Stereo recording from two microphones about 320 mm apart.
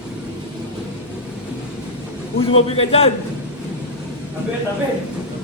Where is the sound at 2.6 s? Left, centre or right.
Centre.